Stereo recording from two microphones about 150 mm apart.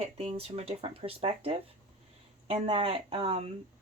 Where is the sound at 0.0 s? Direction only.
45° right (ahead or behind).